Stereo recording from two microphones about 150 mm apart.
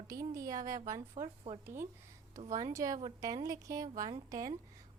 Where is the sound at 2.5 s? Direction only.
20° right (ahead or behind).